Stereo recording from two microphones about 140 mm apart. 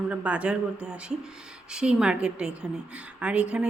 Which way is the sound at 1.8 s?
5° right (ahead or behind).